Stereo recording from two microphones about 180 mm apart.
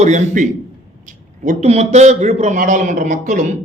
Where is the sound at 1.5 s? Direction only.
35° right (ahead or behind).